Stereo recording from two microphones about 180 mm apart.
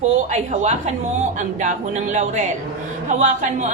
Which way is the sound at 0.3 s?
40° right (ahead or behind).